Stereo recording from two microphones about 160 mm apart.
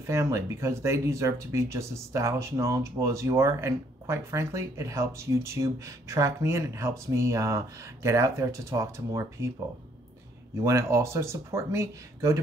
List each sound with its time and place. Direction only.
0.0 s speech: 15° right (ahead or behind)
10.6 s speech: 20° right (ahead or behind)